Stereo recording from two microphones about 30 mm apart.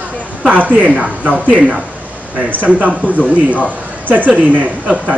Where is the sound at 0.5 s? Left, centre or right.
Right.